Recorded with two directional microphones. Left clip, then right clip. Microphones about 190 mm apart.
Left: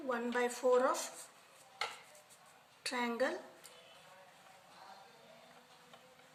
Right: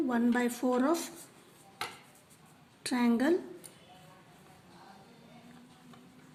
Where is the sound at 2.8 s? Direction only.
30° right (ahead or behind).